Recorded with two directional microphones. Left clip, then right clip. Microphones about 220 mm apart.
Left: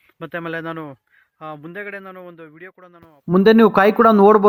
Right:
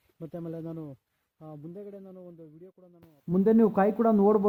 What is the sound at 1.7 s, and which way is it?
Speech, 45° left (ahead or behind).